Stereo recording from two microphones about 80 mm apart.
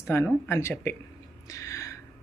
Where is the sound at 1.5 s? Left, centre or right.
Left.